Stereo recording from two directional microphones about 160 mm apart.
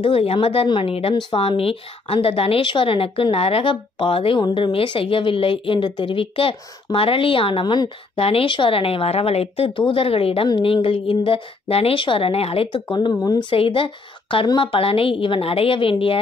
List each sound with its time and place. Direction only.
0.0 s a woman's voice: 35° left (ahead or behind)
12.9 s a woman's voice: 25° left (ahead or behind)